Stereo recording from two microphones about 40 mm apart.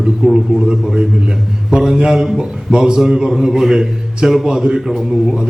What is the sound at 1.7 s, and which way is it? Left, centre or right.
A man's voice, centre.